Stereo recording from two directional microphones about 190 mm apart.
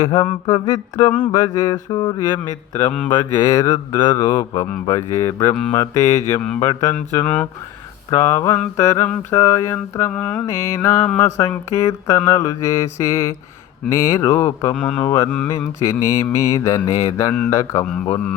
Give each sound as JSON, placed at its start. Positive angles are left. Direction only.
{"t": 0.0, "sound": "mantra", "side_deg": 20}
{"t": 15.0, "sound": "mantra", "side_deg": 15}